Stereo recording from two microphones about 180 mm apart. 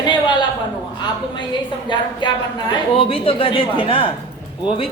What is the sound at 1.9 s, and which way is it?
A woman's voice, 25° left (ahead or behind).